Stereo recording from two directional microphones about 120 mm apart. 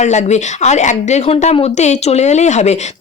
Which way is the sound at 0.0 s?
70° left (ahead or behind).